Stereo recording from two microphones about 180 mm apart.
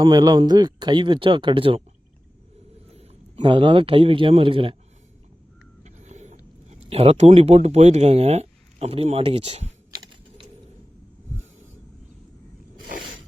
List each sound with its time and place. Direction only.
0.0 s speech: 20° right (ahead or behind)
2.9 s speech: 35° right (ahead or behind)
5.8 s speech: 40° right (ahead or behind)